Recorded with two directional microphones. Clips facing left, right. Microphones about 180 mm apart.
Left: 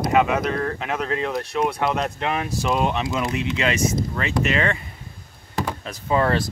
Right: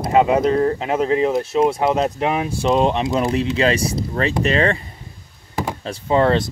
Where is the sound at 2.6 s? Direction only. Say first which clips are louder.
Right 6 dB; 35° right (ahead or behind).